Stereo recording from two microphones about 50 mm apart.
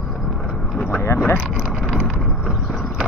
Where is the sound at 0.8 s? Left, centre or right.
Left.